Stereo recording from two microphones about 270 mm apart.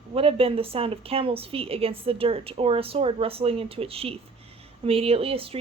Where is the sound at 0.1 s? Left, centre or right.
Right.